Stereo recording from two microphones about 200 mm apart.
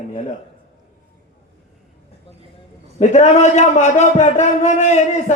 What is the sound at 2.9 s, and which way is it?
A man's voice, 35° left (ahead or behind).